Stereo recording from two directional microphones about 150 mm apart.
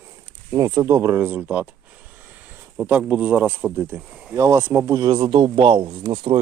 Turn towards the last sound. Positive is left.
turn(degrees=-30)  # may be behind; listen again after turning